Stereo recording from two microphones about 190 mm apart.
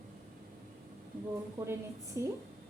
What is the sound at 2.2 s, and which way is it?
Speech, 15° right (ahead or behind).